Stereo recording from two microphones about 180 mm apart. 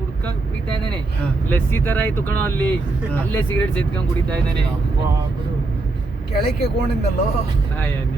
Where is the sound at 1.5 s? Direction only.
10° left (ahead or behind).